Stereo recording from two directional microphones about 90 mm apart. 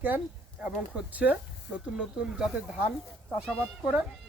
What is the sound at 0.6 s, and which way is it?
Speech, 10° right (ahead or behind).